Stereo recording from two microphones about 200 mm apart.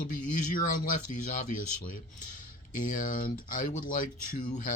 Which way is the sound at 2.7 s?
45° left (ahead or behind).